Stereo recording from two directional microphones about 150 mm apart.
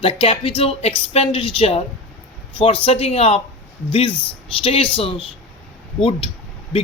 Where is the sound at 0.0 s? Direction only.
40° left (ahead or behind).